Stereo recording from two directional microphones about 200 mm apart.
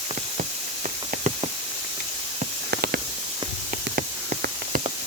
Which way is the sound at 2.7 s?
50° right (ahead or behind).